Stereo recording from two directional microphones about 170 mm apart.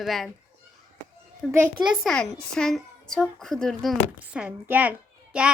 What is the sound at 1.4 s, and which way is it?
A woman's voice, centre (ahead or behind).